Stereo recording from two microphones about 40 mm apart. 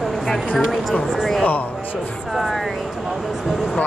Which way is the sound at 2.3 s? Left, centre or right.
Centre.